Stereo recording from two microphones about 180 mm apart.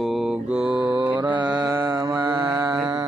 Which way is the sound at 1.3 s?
25° right (ahead or behind).